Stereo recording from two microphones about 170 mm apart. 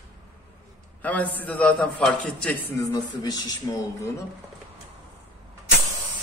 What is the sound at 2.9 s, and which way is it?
Speech, 25° left (ahead or behind).